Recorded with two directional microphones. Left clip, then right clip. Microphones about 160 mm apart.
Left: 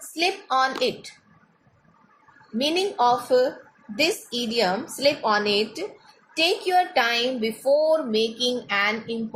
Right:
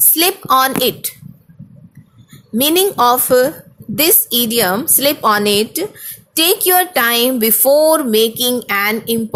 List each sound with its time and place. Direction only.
0.2 s a woman's voice: 70° right (ahead or behind)
2.6 s a woman's voice: 70° right (ahead or behind); by 9.1 s 90° right